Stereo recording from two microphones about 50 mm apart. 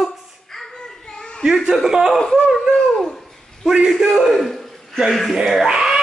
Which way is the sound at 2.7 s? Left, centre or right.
Centre.